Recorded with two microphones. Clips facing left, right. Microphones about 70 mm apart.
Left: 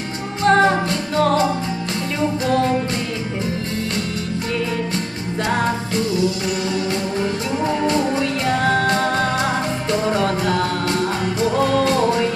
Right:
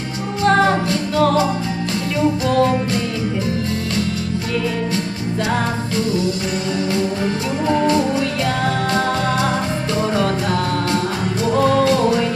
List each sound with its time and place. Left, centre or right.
0.4 s music: left
7.9 s music: left